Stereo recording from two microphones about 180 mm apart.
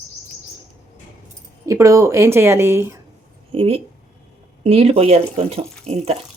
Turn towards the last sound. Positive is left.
turn(degrees=-35)  # may be behind; listen again after turning